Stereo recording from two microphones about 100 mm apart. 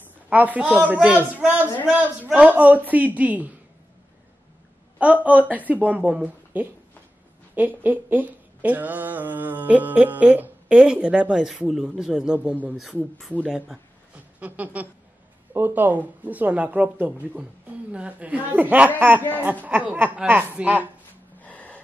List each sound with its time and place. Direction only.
0.3 s speech: 15° right (ahead or behind)
4.9 s speech: 15° right (ahead or behind)
13.7 s a sound: 15° right (ahead or behind)
15.5 s speech: 20° right (ahead or behind)
21.4 s snort: 15° left (ahead or behind)